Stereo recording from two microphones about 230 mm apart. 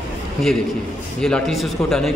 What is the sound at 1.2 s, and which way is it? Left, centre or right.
Speech, centre.